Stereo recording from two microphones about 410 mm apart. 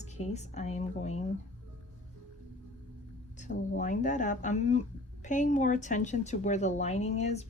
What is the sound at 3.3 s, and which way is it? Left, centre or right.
Speech, centre.